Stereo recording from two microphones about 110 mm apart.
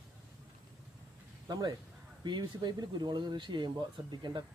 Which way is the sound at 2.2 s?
45° right (ahead or behind).